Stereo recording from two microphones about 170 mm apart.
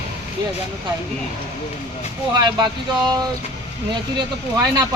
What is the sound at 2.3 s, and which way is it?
Speech, 25° right (ahead or behind).